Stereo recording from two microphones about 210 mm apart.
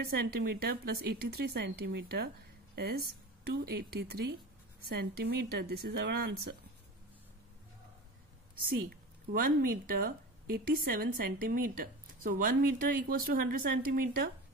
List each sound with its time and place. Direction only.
0.0 s a woman's voice: 50° right (ahead or behind)
9.3 s a woman's voice: 45° right (ahead or behind)